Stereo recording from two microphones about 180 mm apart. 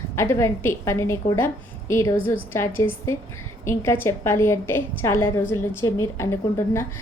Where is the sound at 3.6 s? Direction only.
15° left (ahead or behind).